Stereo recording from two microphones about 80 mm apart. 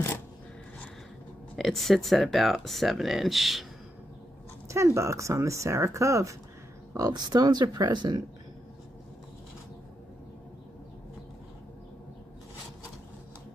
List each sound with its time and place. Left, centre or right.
1.6 s speech: centre
4.6 s speech: right
7.1 s speech: right